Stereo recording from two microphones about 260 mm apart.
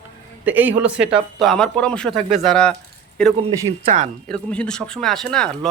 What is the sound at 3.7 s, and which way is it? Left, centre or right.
Speech, right.